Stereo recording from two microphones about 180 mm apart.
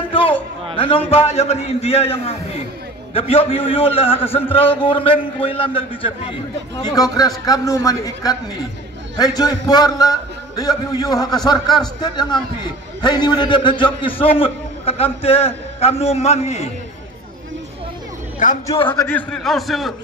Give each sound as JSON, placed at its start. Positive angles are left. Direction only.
{"t": 0.1, "sound": "a sound", "side_deg": 30}
{"t": 0.7, "sound": "a man's voice", "side_deg": 30}
{"t": 18.4, "sound": "a man's voice", "side_deg": 45}
{"t": 19.0, "sound": "a man's voice", "side_deg": 5}